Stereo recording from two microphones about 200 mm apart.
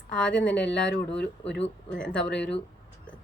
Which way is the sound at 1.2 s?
60° left (ahead or behind).